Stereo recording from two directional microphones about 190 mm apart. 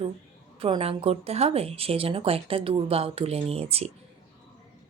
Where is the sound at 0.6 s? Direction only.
30° right (ahead or behind).